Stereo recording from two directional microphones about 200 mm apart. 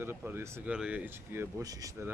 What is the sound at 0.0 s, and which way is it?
Speech, 10° right (ahead or behind).